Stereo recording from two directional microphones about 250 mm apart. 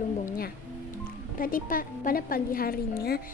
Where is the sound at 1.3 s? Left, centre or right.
Left.